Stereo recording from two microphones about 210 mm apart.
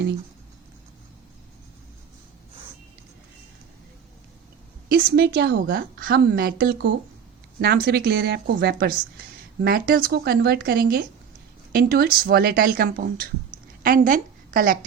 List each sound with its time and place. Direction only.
4.9 s a woman's voice: 50° right (ahead or behind)